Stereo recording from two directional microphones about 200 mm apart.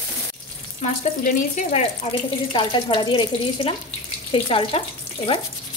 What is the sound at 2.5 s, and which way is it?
Speech, 25° left (ahead or behind).